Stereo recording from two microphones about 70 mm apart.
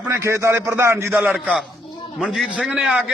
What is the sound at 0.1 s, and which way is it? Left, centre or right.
A man's voice, right.